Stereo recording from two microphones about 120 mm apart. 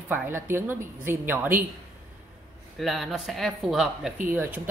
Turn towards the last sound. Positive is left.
turn(degrees=-15)  # may be behind; listen again after turning